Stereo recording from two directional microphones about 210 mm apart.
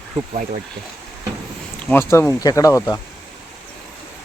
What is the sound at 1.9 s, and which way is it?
Speech, 10° left (ahead or behind).